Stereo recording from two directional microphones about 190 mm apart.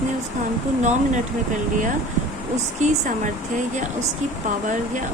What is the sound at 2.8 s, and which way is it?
Speech, 40° right (ahead or behind).